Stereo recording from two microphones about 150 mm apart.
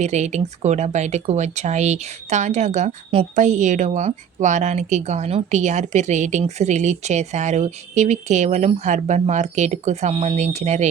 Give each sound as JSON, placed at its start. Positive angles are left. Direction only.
{"t": 0.0, "sound": "a woman's voice", "side_deg": -50}